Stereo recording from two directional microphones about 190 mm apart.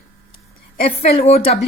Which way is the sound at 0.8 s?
30° left (ahead or behind).